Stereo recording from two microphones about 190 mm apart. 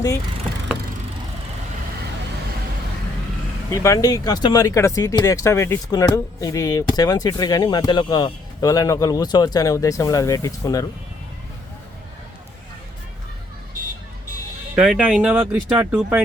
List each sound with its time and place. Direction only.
3.7 s speech: 15° left (ahead or behind)
14.8 s speech: 5° right (ahead or behind)